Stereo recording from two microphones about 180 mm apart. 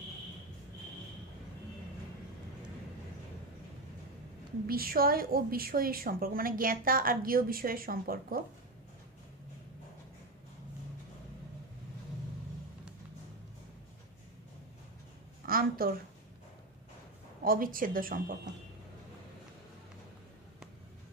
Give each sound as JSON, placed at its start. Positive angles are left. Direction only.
{"t": 4.6, "sound": "a woman's voice", "side_deg": -55}
{"t": 15.4, "sound": "a sound", "side_deg": -55}
{"t": 17.5, "sound": "a woman's voice", "side_deg": -50}